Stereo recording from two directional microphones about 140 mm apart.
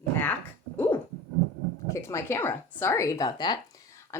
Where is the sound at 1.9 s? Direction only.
20° left (ahead or behind).